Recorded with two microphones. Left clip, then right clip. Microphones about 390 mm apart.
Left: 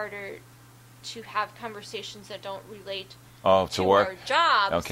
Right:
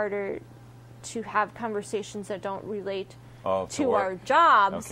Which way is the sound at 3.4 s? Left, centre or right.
Left.